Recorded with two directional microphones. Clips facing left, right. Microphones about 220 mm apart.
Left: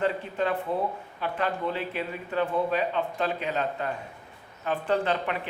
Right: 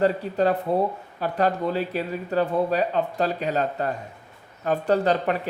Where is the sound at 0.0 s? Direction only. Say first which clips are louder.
Right 6 dB; 40° right (ahead or behind).